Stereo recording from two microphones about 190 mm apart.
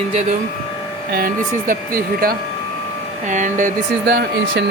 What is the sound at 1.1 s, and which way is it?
Speech, 45° right (ahead or behind).